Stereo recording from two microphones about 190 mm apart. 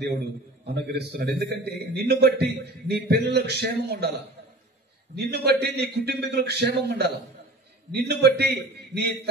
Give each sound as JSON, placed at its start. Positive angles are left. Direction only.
{"t": 0.9, "sound": "a man's voice", "side_deg": -60}
{"t": 5.1, "sound": "a man's voice", "side_deg": -60}